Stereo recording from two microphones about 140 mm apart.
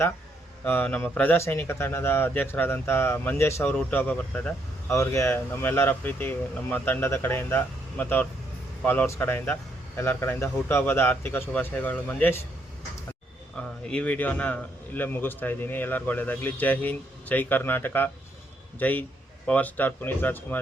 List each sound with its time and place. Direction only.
0.6 s a man's voice: 15° left (ahead or behind)
4.9 s a man's voice: 20° left (ahead or behind)
13.6 s a man's voice: 5° left (ahead or behind)